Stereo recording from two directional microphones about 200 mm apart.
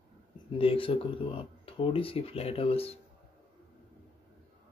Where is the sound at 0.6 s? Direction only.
25° left (ahead or behind).